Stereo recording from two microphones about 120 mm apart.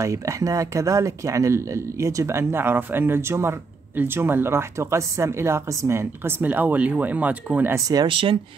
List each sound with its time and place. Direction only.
0.0 s speech: 25° right (ahead or behind)
8.1 s speech: 45° right (ahead or behind)